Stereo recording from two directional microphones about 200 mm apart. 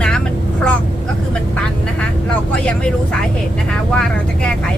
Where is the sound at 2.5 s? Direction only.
5° left (ahead or behind).